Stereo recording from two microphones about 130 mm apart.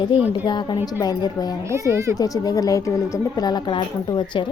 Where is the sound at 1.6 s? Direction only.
20° right (ahead or behind).